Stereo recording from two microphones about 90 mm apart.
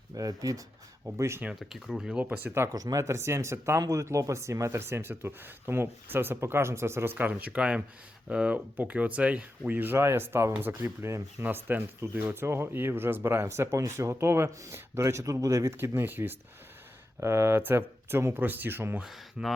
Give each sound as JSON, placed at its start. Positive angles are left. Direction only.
{"t": 0.1, "sound": "speech", "side_deg": -40}
{"t": 1.0, "sound": "speech", "side_deg": -30}
{"t": 1.5, "sound": "speech", "side_deg": -5}
{"t": 2.7, "sound": "speech", "side_deg": -40}
{"t": 19.0, "sound": "speech", "side_deg": 0}